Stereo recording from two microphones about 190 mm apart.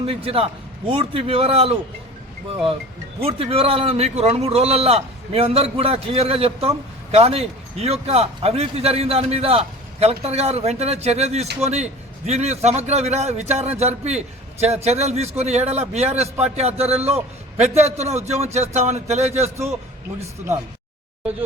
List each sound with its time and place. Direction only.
0.0 s a man's voice: 30° right (ahead or behind)
3.2 s a man's voice: 30° right (ahead or behind)